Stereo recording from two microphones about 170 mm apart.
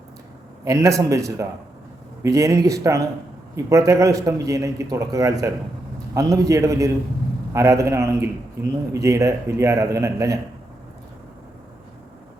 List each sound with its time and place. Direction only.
0.6 s a man's voice: 20° right (ahead or behind)